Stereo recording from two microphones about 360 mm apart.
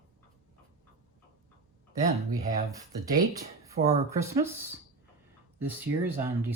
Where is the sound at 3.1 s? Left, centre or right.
Right.